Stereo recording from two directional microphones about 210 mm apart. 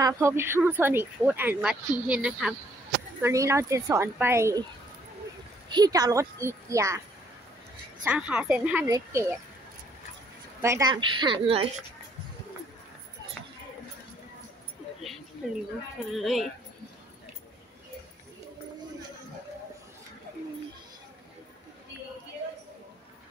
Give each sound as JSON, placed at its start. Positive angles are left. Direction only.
{"t": 0.0, "sound": "speech", "side_deg": -10}
{"t": 5.7, "sound": "speech", "side_deg": -20}
{"t": 8.0, "sound": "speech", "side_deg": -5}
{"t": 10.6, "sound": "a woman's voice", "side_deg": -15}
{"t": 16.2, "sound": "speech", "side_deg": 0}